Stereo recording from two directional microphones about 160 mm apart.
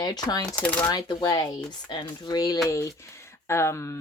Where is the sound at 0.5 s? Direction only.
10° left (ahead or behind).